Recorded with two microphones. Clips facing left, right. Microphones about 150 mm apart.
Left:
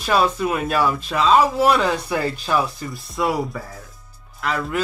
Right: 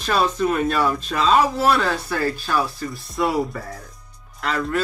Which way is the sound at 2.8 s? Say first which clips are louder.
Even; centre (ahead or behind).